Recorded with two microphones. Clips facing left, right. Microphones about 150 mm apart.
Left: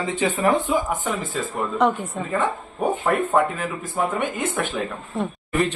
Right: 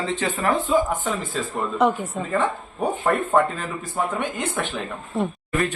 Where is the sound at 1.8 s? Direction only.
5° right (ahead or behind).